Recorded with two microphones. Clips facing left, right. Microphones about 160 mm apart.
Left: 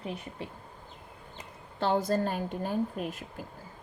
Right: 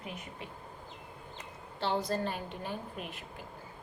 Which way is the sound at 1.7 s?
45° left (ahead or behind).